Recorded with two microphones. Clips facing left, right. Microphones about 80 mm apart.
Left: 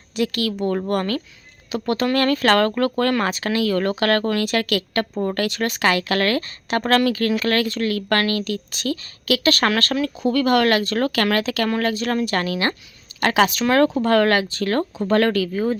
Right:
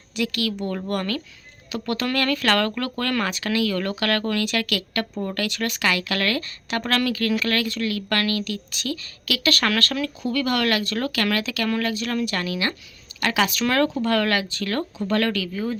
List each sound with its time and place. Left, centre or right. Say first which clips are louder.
0.2 s speech: left 3 dB; left